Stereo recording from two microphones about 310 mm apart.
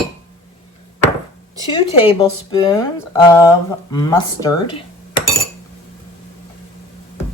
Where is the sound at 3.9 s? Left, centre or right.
Centre.